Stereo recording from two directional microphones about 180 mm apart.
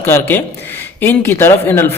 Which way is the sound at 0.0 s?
10° left (ahead or behind).